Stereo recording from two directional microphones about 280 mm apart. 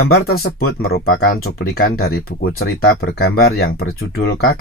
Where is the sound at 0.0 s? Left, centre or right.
Left.